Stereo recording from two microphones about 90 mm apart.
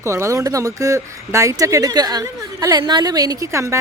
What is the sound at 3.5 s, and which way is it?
Speech, 35° right (ahead or behind).